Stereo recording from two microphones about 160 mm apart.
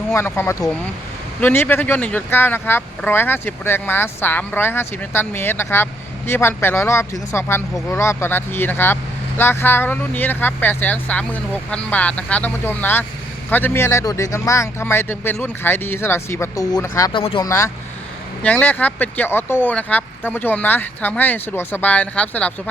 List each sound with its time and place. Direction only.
0.1 s speech: 15° left (ahead or behind)
17.1 s speech: 30° left (ahead or behind)
18.4 s speech: 10° left (ahead or behind)